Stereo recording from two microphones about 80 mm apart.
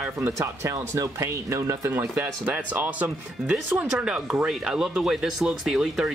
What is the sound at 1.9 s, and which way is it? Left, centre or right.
Speech, right.